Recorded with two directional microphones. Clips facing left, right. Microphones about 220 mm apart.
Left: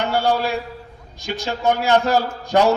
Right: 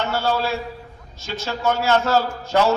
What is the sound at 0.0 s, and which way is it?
A man's voice, 15° left (ahead or behind).